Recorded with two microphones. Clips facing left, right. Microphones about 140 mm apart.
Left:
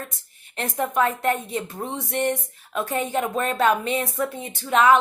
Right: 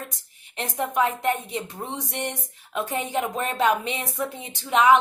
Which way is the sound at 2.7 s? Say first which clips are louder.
Left 2 dB; 15° right (ahead or behind).